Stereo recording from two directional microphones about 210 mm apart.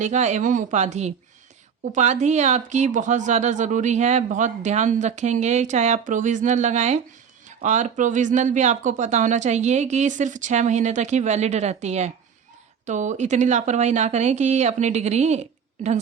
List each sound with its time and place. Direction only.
0.0 s a woman's voice: 35° right (ahead or behind)